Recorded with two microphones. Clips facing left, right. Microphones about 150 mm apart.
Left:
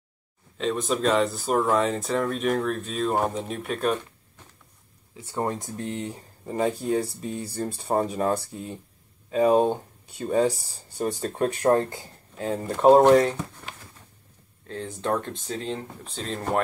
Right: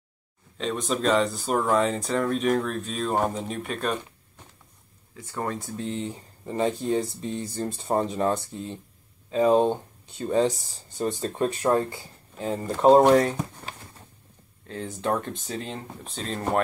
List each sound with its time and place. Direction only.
0.6 s speech: centre (ahead or behind)
5.3 s speech: 25° left (ahead or behind)
11.7 s speech: 15° right (ahead or behind)
13.1 s speech: centre (ahead or behind)
14.7 s speech: 5° right (ahead or behind)